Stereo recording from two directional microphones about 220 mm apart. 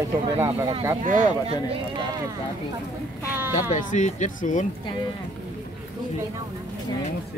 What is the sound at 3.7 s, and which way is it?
Speech, 35° left (ahead or behind).